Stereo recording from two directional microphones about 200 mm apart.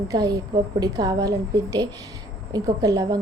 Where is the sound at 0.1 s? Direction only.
20° right (ahead or behind).